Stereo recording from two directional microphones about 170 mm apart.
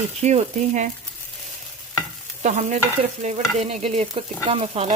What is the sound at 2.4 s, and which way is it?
Stir, 45° right (ahead or behind).